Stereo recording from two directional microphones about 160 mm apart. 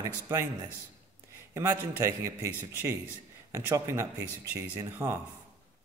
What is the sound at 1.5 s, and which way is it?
Speech, 20° right (ahead or behind).